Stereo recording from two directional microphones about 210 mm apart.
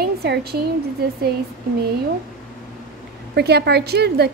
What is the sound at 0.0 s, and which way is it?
Speech, 50° right (ahead or behind).